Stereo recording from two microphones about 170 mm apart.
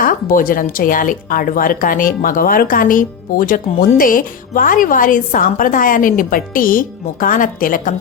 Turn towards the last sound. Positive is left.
turn(degrees=55)  # may be behind; listen again after turning